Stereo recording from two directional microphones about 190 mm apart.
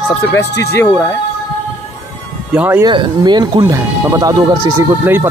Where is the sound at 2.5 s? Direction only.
10° right (ahead or behind).